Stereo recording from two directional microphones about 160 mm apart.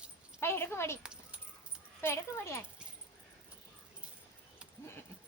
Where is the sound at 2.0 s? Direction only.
15° left (ahead or behind).